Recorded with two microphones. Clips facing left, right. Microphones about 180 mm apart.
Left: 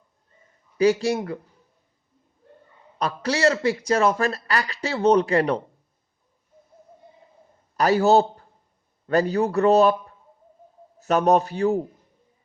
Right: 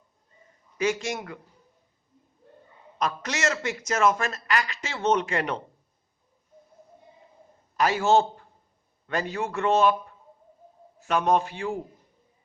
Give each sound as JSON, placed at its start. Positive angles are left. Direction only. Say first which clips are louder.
{"t": 0.8, "sound": "a man's voice", "louder": "left 8 dB", "side_deg": 35}
{"t": 3.0, "sound": "a man's voice", "louder": "left 6 dB", "side_deg": 35}
{"t": 7.8, "sound": "a man's voice", "louder": "left 4 dB", "side_deg": 40}
{"t": 11.0, "sound": "a man's voice", "louder": "left 4 dB", "side_deg": 40}